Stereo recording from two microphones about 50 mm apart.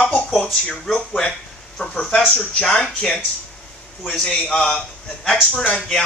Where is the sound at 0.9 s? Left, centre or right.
Left.